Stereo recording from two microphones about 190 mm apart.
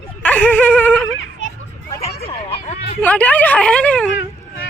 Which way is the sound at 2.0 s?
30° left (ahead or behind).